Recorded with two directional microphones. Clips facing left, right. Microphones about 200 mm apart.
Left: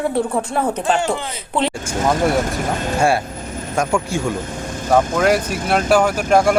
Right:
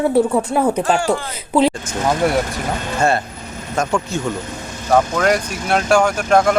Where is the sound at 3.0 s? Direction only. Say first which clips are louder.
Even; 10° left (ahead or behind).